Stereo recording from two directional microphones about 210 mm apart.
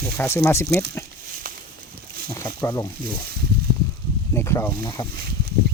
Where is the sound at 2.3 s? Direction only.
20° left (ahead or behind).